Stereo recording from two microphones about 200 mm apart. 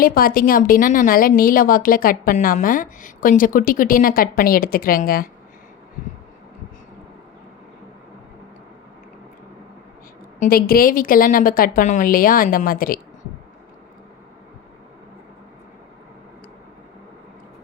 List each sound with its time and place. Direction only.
0.0 s a woman's voice: 45° left (ahead or behind)
10.4 s a woman's voice: 45° left (ahead or behind)